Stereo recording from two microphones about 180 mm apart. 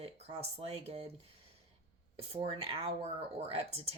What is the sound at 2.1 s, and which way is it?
Speech, 35° right (ahead or behind).